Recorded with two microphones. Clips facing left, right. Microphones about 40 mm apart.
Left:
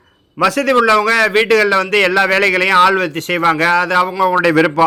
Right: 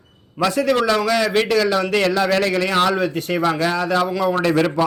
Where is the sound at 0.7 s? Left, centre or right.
Left.